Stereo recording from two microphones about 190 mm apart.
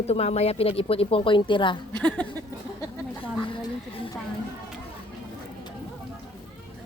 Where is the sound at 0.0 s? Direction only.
35° left (ahead or behind).